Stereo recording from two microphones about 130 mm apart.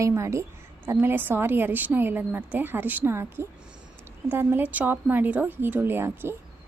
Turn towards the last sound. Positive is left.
turn(degrees=-20)  # may be behind; listen again after turning